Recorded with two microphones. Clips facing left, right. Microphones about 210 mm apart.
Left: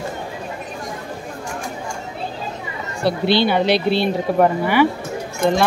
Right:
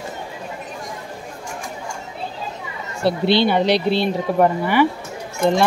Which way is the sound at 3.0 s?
25° right (ahead or behind).